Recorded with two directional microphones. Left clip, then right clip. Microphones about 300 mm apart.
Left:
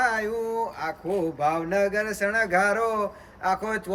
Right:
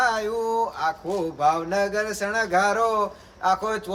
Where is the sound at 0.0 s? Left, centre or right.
Centre.